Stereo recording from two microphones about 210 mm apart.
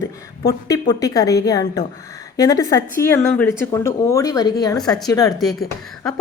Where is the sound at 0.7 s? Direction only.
15° left (ahead or behind).